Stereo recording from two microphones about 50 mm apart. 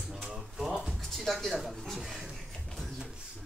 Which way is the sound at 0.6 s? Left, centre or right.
Centre.